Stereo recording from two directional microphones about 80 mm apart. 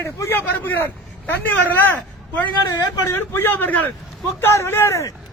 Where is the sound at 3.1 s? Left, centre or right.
Left.